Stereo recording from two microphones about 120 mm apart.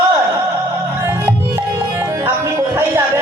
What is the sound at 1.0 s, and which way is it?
Music, 20° right (ahead or behind).